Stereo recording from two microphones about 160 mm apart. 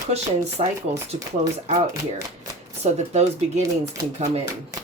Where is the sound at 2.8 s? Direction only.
45° right (ahead or behind).